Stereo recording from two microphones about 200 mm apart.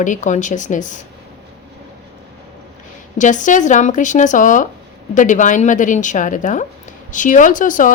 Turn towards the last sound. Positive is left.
turn(degrees=40)  # may be behind; listen again after turning